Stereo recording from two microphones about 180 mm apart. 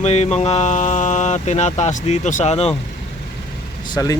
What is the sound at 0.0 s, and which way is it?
Speech, 40° left (ahead or behind).